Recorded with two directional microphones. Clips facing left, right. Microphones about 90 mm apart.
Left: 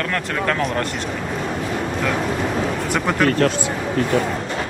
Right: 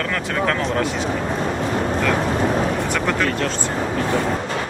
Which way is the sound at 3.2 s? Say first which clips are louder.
Left 4 dB; 50° left (ahead or behind).